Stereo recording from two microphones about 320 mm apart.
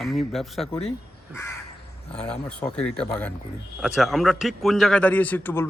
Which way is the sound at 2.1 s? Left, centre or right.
Centre.